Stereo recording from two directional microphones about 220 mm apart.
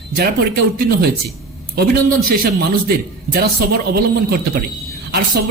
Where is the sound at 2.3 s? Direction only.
45° right (ahead or behind).